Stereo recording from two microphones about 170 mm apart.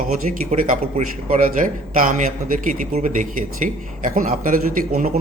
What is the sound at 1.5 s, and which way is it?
A man's voice, 50° right (ahead or behind).